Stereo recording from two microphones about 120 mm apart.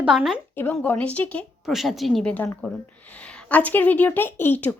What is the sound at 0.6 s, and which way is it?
Speech, 15° left (ahead or behind).